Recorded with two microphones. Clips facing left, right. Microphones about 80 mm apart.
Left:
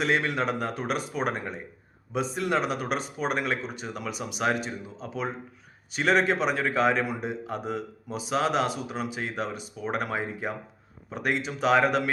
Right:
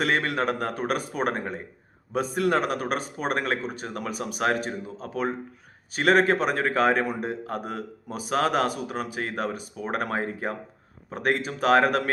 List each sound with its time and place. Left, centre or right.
0.0 s a man's voice: right